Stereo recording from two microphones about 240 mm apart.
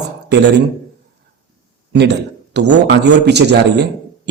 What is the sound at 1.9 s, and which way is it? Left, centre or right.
A man's voice, right.